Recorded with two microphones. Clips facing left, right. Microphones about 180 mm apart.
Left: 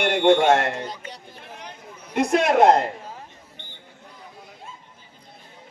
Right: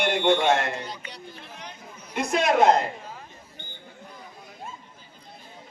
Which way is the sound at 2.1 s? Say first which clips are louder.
Left 3 dB; 60° left (ahead or behind).